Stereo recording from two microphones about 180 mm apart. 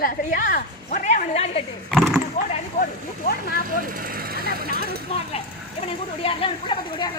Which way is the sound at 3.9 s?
50° right (ahead or behind).